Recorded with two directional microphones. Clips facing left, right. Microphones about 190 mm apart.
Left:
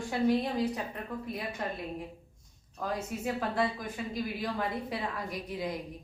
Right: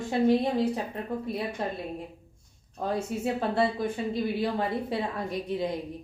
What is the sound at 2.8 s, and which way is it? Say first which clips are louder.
Speech: right 5 dB; 30° right (ahead or behind).